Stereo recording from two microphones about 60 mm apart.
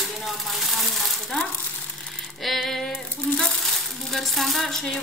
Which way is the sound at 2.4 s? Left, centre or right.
Centre.